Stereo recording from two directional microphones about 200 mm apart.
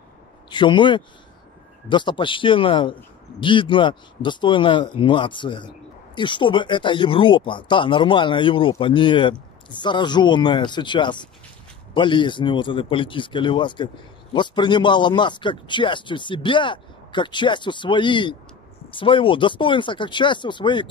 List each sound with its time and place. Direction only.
0.5 s a man's voice: 25° left (ahead or behind)